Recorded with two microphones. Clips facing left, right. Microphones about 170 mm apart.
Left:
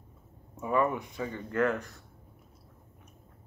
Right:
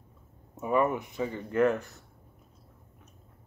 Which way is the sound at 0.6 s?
20° right (ahead or behind).